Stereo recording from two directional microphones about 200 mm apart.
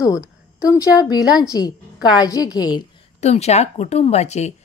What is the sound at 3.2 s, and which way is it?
Speech, 35° left (ahead or behind).